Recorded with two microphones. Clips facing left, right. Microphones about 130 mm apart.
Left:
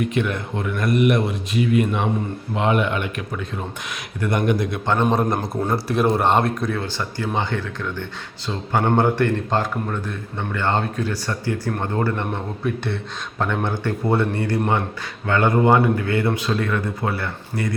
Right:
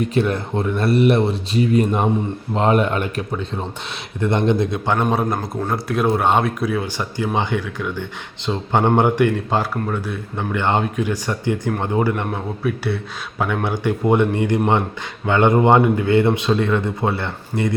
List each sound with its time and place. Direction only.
0.0 s speech: 35° right (ahead or behind)
3.3 s speech: 25° right (ahead or behind)
5.1 s a man's voice: centre (ahead or behind); by 17.7 s 20° right (ahead or behind)